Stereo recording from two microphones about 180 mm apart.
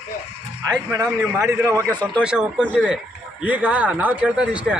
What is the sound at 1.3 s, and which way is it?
Speech, 15° right (ahead or behind).